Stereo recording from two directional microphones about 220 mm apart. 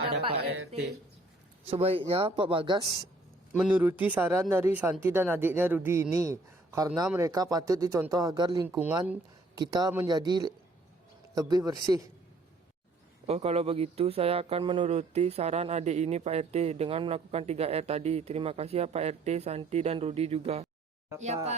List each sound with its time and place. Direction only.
1.6 s a man's voice: 25° right (ahead or behind)
3.5 s speech: 5° right (ahead or behind)
13.2 s a man's voice: 30° right (ahead or behind)